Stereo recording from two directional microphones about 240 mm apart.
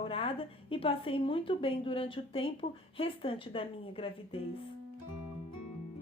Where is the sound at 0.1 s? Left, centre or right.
Left.